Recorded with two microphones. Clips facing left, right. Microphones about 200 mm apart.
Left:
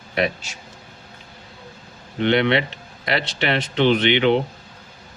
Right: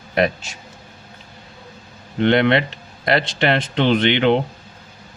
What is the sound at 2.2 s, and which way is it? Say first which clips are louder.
A man's voice: right 3 dB; 50° right (ahead or behind).